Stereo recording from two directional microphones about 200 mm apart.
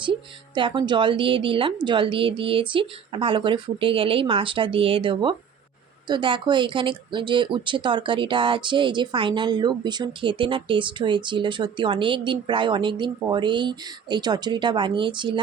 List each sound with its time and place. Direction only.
0.5 s speech: 25° right (ahead or behind)